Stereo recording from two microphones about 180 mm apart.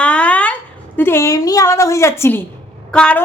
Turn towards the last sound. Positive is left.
turn(degrees=5)  # may be behind; listen again after turning